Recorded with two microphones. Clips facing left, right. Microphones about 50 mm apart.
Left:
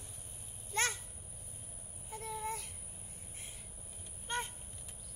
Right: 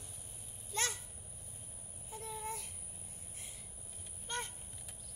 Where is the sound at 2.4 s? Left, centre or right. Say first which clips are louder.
Left 4 dB; left.